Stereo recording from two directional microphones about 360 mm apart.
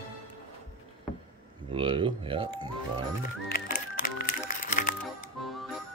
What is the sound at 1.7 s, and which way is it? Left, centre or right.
Speech, centre.